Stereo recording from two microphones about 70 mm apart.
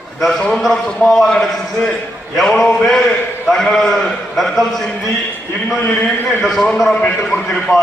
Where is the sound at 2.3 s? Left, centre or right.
Centre.